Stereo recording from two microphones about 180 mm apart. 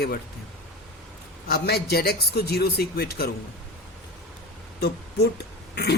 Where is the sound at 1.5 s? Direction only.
60° left (ahead or behind).